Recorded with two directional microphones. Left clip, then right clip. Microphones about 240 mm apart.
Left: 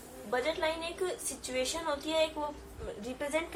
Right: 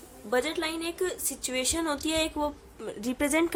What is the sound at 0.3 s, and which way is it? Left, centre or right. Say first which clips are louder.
A woman's voice: right 3 dB; right.